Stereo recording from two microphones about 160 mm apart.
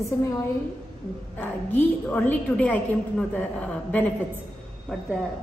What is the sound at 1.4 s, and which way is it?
A woman's voice, 10° left (ahead or behind).